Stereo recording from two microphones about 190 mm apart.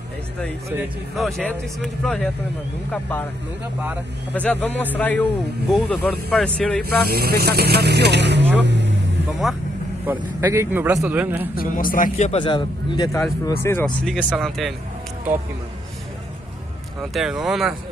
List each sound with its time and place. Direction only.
1.1 s a man's voice: centre (ahead or behind)
4.3 s a man's voice: 10° left (ahead or behind)
6.8 s speech: 55° right (ahead or behind)
8.5 s vehicle: 70° right (ahead or behind)
9.4 s speech: centre (ahead or behind)
10.0 s a man's voice: 15° right (ahead or behind)
11.5 s a man's voice: 50° left (ahead or behind); by 14.7 s centre (ahead or behind)
17.1 s speech: 5° right (ahead or behind)